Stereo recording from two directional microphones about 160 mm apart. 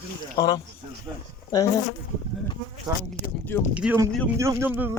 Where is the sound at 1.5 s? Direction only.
60° left (ahead or behind).